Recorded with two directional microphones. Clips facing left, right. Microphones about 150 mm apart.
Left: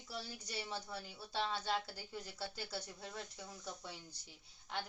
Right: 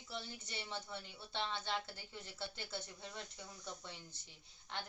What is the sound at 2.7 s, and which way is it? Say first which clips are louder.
Speech: left 1 dB; 35° left (ahead or behind).